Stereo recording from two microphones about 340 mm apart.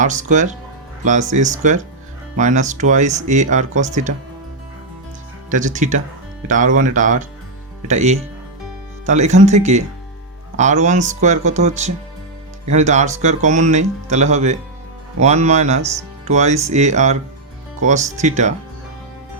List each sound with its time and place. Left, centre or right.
0.0 s speech: right
5.5 s speech: right